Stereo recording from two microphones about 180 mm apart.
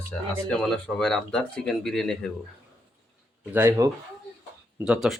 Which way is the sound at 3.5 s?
15° right (ahead or behind).